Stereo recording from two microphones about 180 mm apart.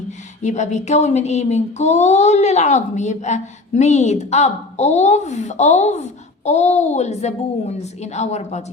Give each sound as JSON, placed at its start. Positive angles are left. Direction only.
{"t": 0.4, "sound": "speech", "side_deg": 40}